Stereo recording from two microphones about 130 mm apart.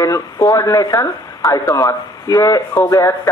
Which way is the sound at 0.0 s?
25° left (ahead or behind).